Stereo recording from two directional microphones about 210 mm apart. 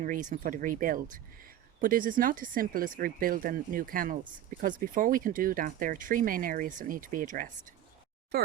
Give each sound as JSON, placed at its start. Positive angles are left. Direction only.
{"t": 0.0, "sound": "speech", "side_deg": -40}